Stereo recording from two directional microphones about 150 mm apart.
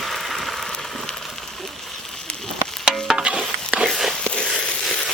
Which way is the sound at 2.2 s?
Centre (ahead or behind).